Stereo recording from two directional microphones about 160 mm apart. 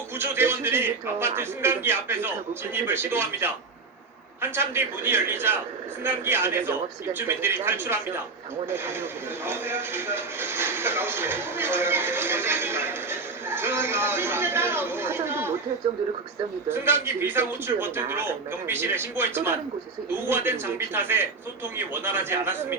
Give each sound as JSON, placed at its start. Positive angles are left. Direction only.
{"t": 0.2, "sound": "a man's voice", "side_deg": -15}
{"t": 9.5, "sound": "speech", "side_deg": -15}
{"t": 16.6, "sound": "a man's voice", "side_deg": -15}